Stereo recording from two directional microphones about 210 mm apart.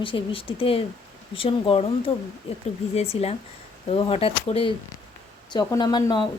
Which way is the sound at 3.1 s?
30° left (ahead or behind).